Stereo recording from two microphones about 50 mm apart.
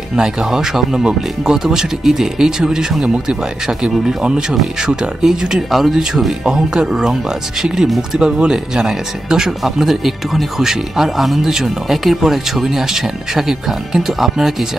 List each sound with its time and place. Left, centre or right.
0.1 s speech: centre